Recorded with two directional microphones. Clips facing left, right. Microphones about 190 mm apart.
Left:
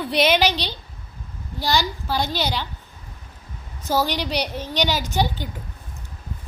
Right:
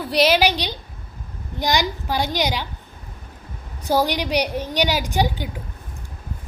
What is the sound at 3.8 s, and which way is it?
A woman's voice, 15° right (ahead or behind).